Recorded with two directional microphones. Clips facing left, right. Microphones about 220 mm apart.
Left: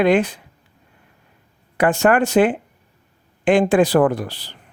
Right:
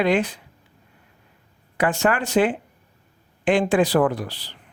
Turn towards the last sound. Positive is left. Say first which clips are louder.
# left 4 dB
turn(degrees=50)  # may be behind; listen again after turning